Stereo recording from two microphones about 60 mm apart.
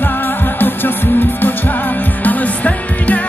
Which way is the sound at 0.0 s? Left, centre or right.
Left.